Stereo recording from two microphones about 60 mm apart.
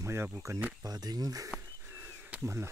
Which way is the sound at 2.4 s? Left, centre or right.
Right.